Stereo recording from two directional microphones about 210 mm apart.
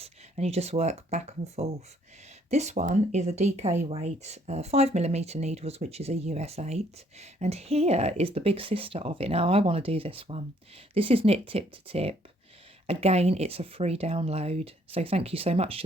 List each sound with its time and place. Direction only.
0.0 s speech: 30° right (ahead or behind)